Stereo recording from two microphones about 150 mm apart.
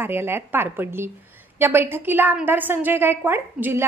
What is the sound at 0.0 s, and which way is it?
A woman's voice, 15° right (ahead or behind).